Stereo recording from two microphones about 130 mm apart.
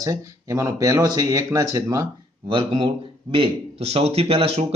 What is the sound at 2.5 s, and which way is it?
A man's voice, 40° right (ahead or behind).